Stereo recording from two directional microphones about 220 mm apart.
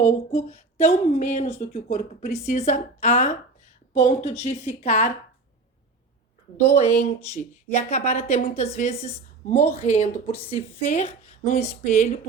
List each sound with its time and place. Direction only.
0.0 s a woman's voice: 30° left (ahead or behind)
6.6 s a woman's voice: 30° left (ahead or behind)